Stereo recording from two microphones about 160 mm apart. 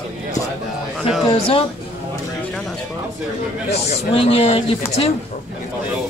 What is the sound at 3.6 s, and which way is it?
A man's voice, 40° left (ahead or behind).